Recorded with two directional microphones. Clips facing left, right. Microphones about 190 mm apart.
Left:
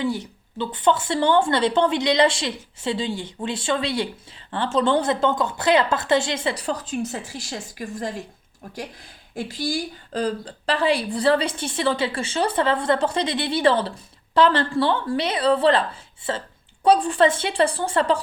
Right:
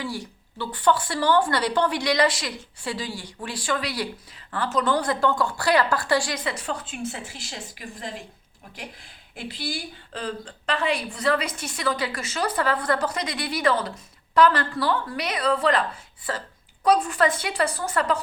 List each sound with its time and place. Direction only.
0.0 s a woman's voice: 20° left (ahead or behind); by 8.1 s 45° left (ahead or behind)
9.3 s a woman's voice: 45° left (ahead or behind)